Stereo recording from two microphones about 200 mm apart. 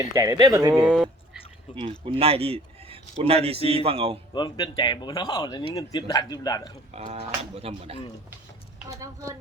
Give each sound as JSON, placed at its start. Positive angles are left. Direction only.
{"t": 0.1, "sound": "a man's voice", "side_deg": -20}
{"t": 0.9, "sound": "a sound", "side_deg": 0}
{"t": 1.7, "sound": "a man's voice", "side_deg": -25}
{"t": 4.4, "sound": "speech", "side_deg": 20}
{"t": 6.9, "sound": "a sound", "side_deg": -35}
{"t": 7.5, "sound": "a man's voice", "side_deg": -30}
{"t": 8.9, "sound": "a woman's voice", "side_deg": -15}